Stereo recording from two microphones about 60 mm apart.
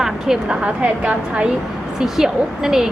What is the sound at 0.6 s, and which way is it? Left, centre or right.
A woman's voice, centre.